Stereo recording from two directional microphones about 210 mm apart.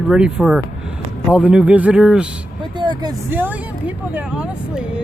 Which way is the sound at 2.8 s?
20° right (ahead or behind).